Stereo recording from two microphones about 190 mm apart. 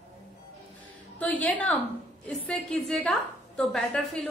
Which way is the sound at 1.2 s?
10° left (ahead or behind).